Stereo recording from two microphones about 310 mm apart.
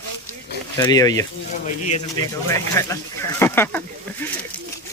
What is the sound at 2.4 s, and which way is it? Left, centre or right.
Speech, centre.